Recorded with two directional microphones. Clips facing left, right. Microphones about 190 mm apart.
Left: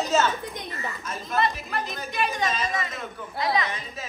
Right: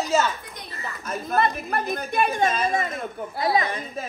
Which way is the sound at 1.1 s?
55° right (ahead or behind).